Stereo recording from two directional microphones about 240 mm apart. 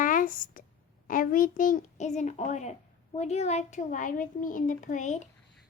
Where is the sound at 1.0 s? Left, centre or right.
Left.